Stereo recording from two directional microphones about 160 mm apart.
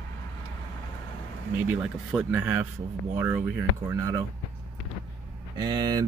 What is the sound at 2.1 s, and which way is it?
Speech, 15° right (ahead or behind).